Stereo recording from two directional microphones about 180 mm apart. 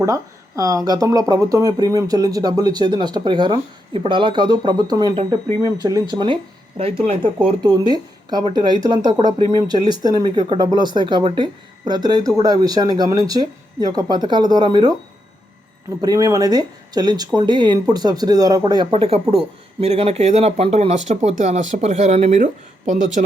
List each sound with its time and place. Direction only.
0.0 s speech: 20° right (ahead or behind)
9.4 s speech: 25° left (ahead or behind)
9.6 s speech: 25° right (ahead or behind)
16.0 s speech: 20° right (ahead or behind); by 23.2 s 40° right (ahead or behind)